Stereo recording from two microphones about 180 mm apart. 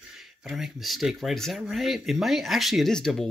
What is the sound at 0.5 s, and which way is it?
Speech, centre (ahead or behind).